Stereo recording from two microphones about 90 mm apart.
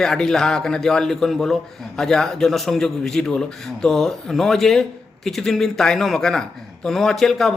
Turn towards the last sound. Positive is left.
turn(degrees=5)  # may be behind; listen again after turning